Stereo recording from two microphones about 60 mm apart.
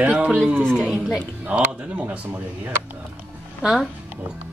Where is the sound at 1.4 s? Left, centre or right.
Right.